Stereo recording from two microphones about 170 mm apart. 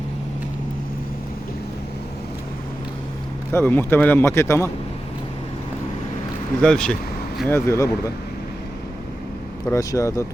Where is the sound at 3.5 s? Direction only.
15° left (ahead or behind).